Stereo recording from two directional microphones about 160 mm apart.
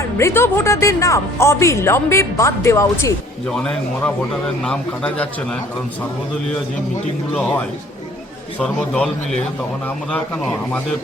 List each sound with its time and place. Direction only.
0.2 s a woman's voice: 15° left (ahead or behind)
3.5 s a man's voice: 5° left (ahead or behind)
8.5 s a man's voice: 5° left (ahead or behind)